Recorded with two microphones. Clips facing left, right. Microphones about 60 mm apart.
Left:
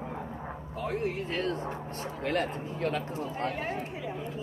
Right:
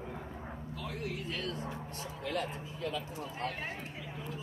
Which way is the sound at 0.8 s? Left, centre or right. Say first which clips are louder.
Left 9 dB; left.